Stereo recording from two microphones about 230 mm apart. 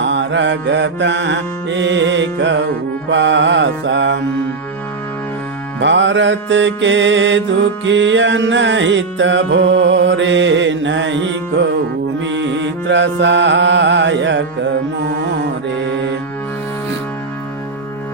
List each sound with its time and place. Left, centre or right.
0.0 s mantra: right
5.8 s mantra: right
12.2 s music: right